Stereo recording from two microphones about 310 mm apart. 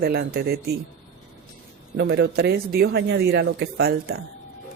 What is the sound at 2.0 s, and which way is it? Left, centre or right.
Speech, right.